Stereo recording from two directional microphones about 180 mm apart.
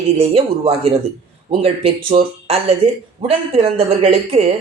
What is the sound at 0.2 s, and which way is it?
Speech, 35° right (ahead or behind).